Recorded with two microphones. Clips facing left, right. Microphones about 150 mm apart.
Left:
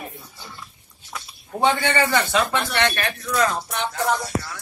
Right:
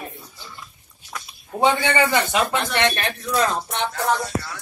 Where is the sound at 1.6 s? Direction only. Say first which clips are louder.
Right 1 dB; 15° right (ahead or behind).